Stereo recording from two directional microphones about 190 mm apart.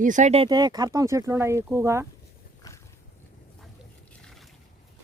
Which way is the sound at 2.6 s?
20° left (ahead or behind).